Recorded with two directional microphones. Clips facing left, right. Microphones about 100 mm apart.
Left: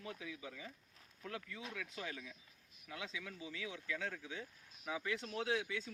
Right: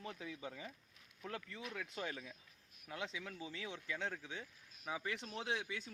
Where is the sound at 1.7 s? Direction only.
40° right (ahead or behind).